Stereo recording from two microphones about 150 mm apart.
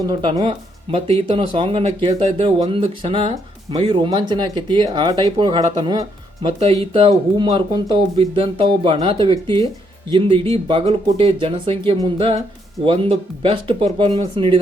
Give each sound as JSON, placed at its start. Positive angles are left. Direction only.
{"t": 0.0, "sound": "speech", "side_deg": -30}
{"t": 6.6, "sound": "speech", "side_deg": -40}